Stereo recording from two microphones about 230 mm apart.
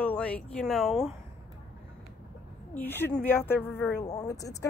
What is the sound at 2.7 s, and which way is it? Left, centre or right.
A woman's voice, centre.